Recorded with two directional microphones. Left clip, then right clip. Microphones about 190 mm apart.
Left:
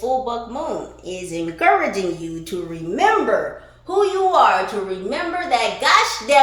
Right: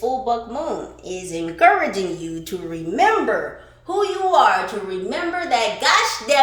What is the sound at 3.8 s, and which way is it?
Speech, 25° right (ahead or behind).